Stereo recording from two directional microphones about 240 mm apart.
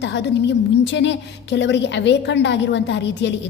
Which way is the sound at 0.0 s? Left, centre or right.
Left.